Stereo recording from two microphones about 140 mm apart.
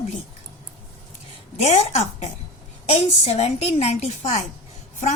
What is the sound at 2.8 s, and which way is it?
A woman's voice, 50° left (ahead or behind).